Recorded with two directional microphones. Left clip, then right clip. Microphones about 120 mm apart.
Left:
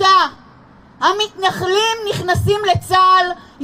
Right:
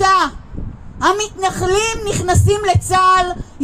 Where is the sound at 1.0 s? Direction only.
45° right (ahead or behind).